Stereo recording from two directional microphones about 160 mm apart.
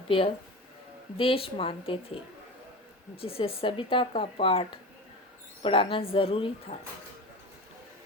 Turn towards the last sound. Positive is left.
turn(degrees=35)  # may be behind; listen again after turning